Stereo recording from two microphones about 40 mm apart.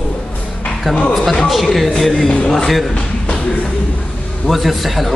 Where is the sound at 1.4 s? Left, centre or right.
Centre.